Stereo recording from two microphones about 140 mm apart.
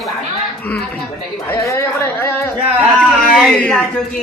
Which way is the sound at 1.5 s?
20° left (ahead or behind).